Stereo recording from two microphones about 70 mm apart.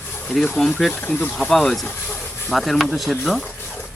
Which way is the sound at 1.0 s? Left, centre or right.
Left.